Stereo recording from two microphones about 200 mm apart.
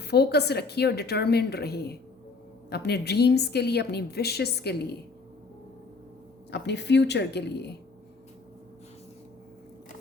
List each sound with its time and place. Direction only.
0.0 s a woman's voice: 55° left (ahead or behind)
6.5 s a woman's voice: 60° left (ahead or behind)